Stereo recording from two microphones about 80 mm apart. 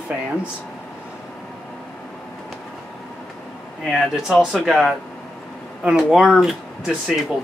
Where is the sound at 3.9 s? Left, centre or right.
Centre.